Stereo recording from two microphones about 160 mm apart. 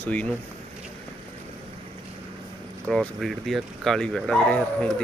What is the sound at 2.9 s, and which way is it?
Speech, centre (ahead or behind).